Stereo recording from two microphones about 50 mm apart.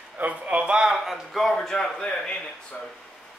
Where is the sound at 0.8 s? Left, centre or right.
Centre.